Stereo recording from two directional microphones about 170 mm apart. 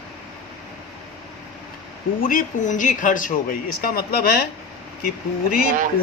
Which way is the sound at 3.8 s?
60° left (ahead or behind).